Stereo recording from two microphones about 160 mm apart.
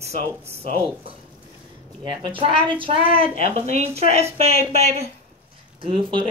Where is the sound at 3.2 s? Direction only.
45° right (ahead or behind).